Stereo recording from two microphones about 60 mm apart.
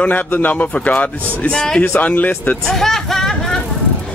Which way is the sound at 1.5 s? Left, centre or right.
Centre.